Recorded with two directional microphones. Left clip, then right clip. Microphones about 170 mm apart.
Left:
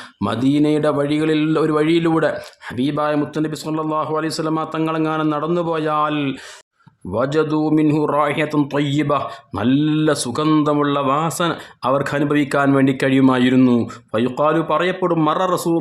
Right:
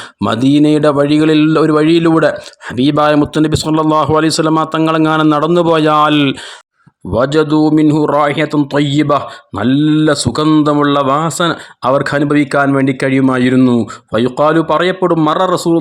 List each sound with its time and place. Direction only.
0.2 s speech: 35° right (ahead or behind)
7.1 s speech: 35° right (ahead or behind)